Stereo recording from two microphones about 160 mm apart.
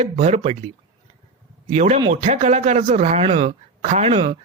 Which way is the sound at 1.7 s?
45° right (ahead or behind).